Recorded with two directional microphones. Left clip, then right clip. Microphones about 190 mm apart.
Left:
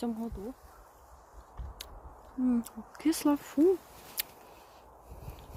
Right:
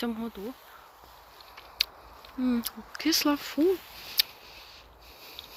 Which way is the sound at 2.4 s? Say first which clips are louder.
Right 1 dB; 10° left (ahead or behind).